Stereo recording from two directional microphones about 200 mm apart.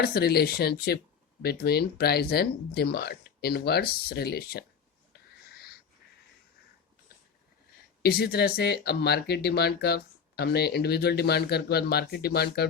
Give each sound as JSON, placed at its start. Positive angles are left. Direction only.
{"t": 0.0, "sound": "speech", "side_deg": 50}
{"t": 8.0, "sound": "speech", "side_deg": 55}